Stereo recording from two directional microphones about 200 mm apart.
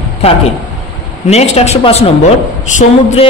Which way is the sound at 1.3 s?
30° left (ahead or behind).